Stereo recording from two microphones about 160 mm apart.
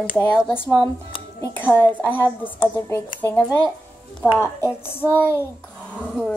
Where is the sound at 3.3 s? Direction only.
5° left (ahead or behind).